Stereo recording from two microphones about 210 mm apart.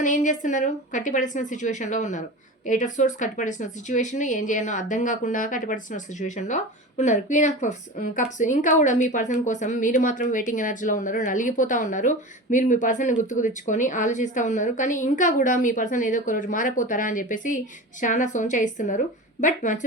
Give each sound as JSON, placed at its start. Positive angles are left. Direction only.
{"t": 0.0, "sound": "speech", "side_deg": 35}